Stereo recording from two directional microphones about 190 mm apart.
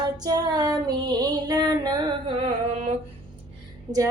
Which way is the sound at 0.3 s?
20° right (ahead or behind).